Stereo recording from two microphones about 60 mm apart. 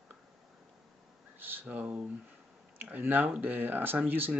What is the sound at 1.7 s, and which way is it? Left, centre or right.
Speech, right.